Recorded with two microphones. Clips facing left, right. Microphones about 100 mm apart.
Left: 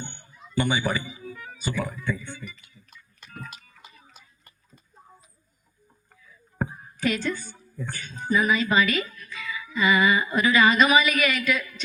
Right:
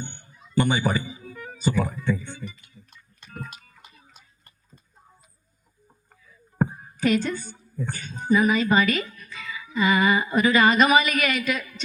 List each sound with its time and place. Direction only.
0.3 s speech: 45° right (ahead or behind)
2.8 s a sound: 35° right (ahead or behind)
4.1 s tick-tock: 10° left (ahead or behind)
6.2 s a sound: 50° right (ahead or behind)
7.8 s a woman's voice: 45° right (ahead or behind)
9.1 s music: 45° right (ahead or behind)